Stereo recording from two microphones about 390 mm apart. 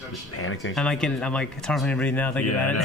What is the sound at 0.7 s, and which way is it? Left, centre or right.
Speech, centre.